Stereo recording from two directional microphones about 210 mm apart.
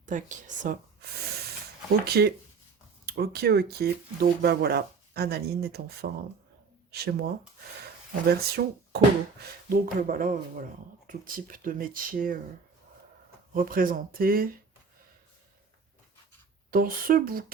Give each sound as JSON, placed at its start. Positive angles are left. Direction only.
{"t": 0.0, "sound": "speech", "side_deg": -35}
{"t": 2.0, "sound": "speech", "side_deg": -50}
{"t": 8.3, "sound": "speech", "side_deg": -50}
{"t": 13.5, "sound": "speech", "side_deg": -40}
{"t": 16.7, "sound": "speech", "side_deg": -45}